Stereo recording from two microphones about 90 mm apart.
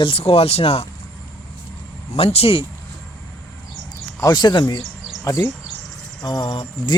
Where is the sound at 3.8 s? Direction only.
50° left (ahead or behind).